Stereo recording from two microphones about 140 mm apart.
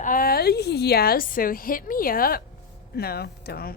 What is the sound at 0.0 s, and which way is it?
A woman's voice, 85° left.